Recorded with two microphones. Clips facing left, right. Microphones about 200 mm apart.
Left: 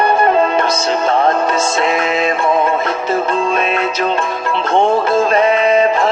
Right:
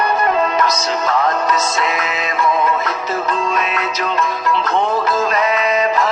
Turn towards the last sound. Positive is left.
turn(degrees=30)  # may be behind; listen again after turning